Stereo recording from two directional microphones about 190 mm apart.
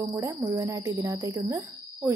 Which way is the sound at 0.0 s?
20° right (ahead or behind).